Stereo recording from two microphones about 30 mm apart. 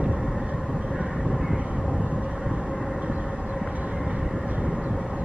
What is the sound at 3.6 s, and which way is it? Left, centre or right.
Vehicle, right.